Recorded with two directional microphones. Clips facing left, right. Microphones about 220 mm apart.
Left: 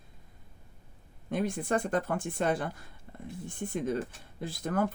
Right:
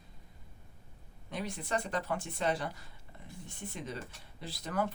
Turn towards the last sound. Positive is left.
turn(degrees=50)  # may be behind; listen again after turning